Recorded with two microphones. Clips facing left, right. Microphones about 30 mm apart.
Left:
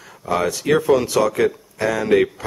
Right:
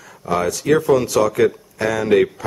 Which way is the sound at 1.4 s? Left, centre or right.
Centre.